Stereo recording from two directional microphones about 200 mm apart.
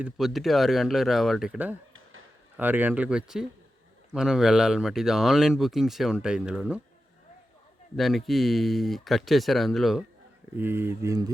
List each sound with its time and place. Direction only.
0.0 s speech: centre (ahead or behind)
7.9 s speech: centre (ahead or behind); by 11.3 s 15° right (ahead or behind)